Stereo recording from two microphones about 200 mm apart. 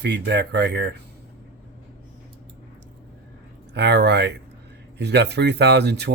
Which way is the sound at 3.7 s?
55° right (ahead or behind).